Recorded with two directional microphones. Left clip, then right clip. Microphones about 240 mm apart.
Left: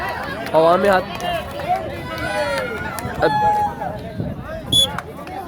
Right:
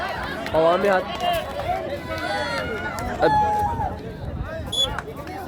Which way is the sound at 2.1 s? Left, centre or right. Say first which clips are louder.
Left 5 dB; left.